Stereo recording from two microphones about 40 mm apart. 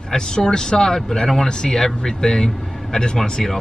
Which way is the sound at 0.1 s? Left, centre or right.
Centre.